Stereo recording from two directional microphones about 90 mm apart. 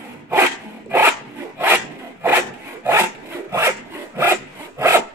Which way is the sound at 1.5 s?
25° right (ahead or behind).